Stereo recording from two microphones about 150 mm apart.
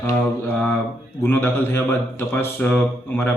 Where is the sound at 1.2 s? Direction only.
15° left (ahead or behind).